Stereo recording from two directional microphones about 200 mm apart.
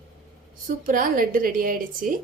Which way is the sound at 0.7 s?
40° right (ahead or behind).